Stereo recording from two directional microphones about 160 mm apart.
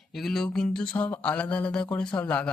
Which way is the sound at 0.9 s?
10° left (ahead or behind).